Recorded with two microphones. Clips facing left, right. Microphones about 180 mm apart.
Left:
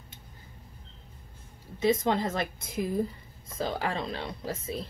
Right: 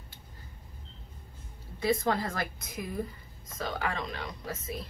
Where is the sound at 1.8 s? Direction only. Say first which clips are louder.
Left 3 dB; 20° left (ahead or behind).